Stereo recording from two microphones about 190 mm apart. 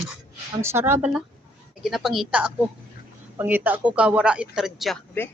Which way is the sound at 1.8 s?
Centre (ahead or behind).